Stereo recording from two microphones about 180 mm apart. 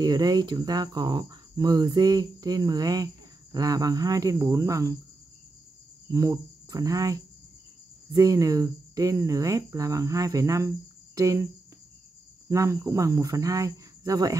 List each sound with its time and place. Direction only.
0.0 s speech: 20° right (ahead or behind)
6.1 s speech: 20° right (ahead or behind)
12.4 s speech: 15° right (ahead or behind)